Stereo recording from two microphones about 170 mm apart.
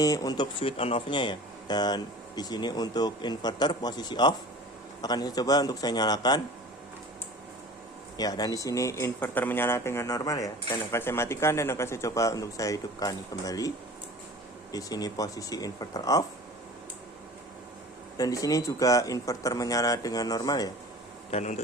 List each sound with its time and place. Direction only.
0.0 s speech: 20° left (ahead or behind)
8.2 s speech: 20° left (ahead or behind)
18.2 s speech: 20° left (ahead or behind)
21.2 s speech: 40° left (ahead or behind)